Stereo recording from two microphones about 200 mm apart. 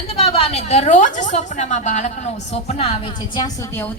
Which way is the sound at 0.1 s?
30° left (ahead or behind).